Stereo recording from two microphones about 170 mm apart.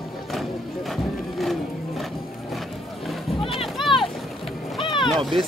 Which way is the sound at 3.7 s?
Centre (ahead or behind).